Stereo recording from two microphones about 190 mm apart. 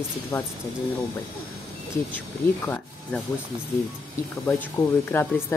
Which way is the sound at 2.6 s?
10° left (ahead or behind).